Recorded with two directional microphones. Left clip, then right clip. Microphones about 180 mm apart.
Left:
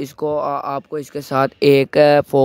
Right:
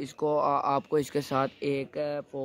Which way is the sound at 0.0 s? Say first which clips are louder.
Left 6 dB; 20° left (ahead or behind).